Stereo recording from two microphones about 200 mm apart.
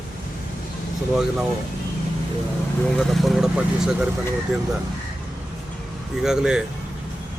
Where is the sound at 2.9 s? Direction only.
Centre (ahead or behind).